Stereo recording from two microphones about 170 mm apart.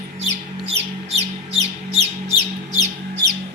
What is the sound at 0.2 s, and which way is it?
Squawk, 35° right (ahead or behind).